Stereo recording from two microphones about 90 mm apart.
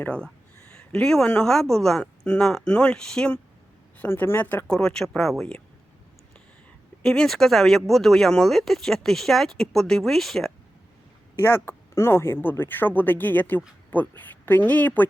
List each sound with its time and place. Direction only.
0.0 s speech: 10° left (ahead or behind)
0.7 s a sound: 10° left (ahead or behind)
1.3 s speech: 10° left (ahead or behind)
3.9 s speech: 20° left (ahead or behind)
4.7 s speech: 5° left (ahead or behind)
7.0 s speech: 5° left (ahead or behind)
11.3 s speech: 25° left (ahead or behind)